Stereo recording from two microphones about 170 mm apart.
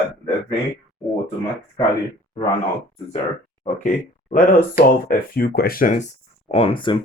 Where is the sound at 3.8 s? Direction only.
55° left (ahead or behind).